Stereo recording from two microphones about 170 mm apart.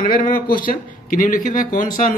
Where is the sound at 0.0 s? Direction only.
55° left (ahead or behind).